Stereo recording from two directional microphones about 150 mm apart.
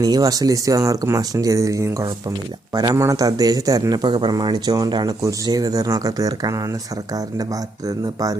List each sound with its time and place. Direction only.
0.0 s a man's voice: 25° right (ahead or behind)
7.9 s a man's voice: 25° right (ahead or behind)